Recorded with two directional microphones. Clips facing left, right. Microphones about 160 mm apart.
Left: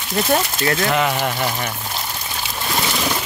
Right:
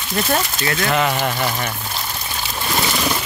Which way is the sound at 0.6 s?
35° left (ahead or behind).